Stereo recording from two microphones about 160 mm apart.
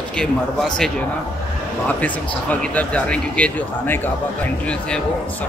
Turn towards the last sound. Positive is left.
turn(degrees=10)  # may be behind; listen again after turning